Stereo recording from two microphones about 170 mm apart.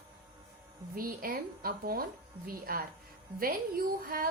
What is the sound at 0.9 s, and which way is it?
A woman's voice, 60° right (ahead or behind).